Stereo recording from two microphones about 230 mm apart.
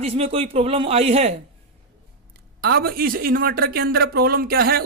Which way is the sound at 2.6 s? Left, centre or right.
Right.